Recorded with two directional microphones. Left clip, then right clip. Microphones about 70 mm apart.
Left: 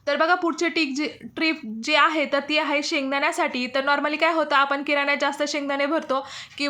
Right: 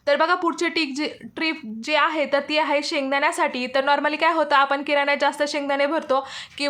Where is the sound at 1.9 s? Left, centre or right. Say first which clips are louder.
Left 1 dB; centre.